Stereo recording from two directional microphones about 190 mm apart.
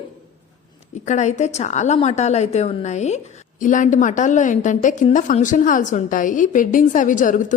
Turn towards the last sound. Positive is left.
turn(degrees=40)  # may be behind; listen again after turning